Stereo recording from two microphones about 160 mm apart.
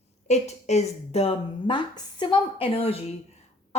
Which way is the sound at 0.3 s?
45° left (ahead or behind).